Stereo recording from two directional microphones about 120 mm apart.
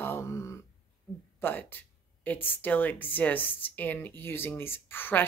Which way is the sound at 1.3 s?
15° left (ahead or behind).